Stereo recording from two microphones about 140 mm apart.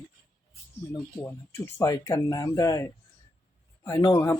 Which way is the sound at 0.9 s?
15° left (ahead or behind).